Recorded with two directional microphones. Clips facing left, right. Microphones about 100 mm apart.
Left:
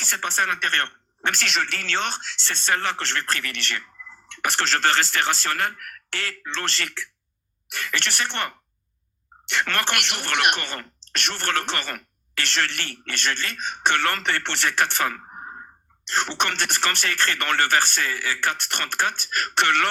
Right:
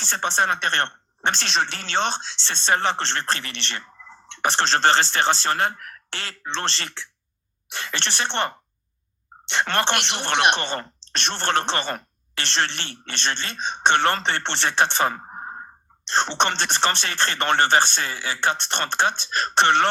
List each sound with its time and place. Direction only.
0.0 s speech: 20° right (ahead or behind)